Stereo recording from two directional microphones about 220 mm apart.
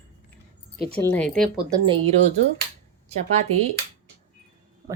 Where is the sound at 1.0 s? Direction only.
5° left (ahead or behind).